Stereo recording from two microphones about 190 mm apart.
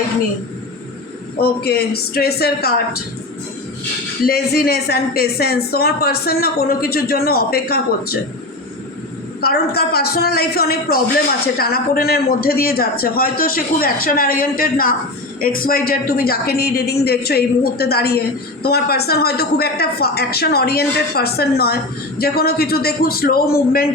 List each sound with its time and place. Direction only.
1.4 s a woman's voice: 55° left (ahead or behind)
4.3 s speech: 55° left (ahead or behind)
9.4 s a woman's voice: 55° left (ahead or behind)